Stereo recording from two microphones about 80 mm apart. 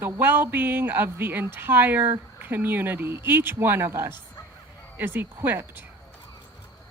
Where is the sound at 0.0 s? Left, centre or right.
Right.